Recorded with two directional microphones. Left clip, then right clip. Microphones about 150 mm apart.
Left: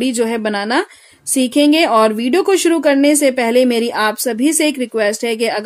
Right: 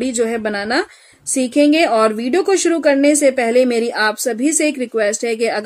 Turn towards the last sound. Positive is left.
turn(degrees=45)  # may be behind; listen again after turning